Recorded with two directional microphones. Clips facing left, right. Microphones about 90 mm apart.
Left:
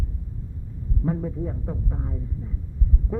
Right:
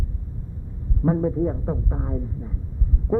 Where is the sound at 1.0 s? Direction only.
35° right (ahead or behind).